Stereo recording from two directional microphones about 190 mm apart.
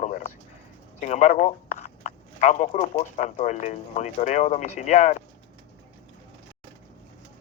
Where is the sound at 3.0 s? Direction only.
40° left (ahead or behind).